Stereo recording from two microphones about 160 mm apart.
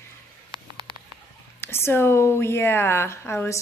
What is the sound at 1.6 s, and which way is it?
A woman's voice, 15° left (ahead or behind).